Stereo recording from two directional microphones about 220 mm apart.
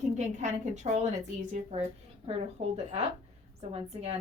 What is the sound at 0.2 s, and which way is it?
A woman's voice, 30° right (ahead or behind).